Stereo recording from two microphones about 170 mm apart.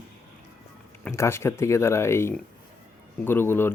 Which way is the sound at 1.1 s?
15° left (ahead or behind).